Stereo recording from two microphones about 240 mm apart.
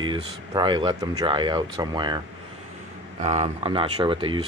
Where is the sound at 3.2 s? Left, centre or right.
Right.